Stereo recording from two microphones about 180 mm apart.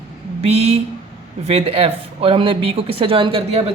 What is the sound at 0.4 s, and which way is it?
Speech, 35° right (ahead or behind).